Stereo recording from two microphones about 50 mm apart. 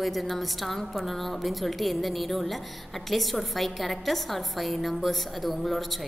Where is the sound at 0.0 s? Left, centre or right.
Centre.